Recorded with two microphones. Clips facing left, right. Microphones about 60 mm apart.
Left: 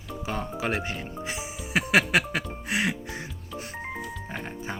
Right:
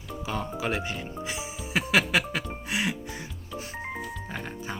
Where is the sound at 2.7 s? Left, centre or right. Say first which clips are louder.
Left 2 dB; left.